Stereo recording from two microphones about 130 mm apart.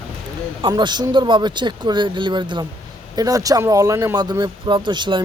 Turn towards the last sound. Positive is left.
turn(degrees=-35)  # may be behind; listen again after turning